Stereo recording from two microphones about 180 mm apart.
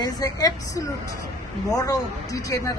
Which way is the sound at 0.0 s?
20° left (ahead or behind).